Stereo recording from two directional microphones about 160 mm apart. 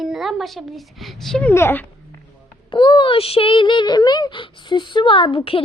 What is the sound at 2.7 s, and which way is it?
A woman's voice, 30° left (ahead or behind).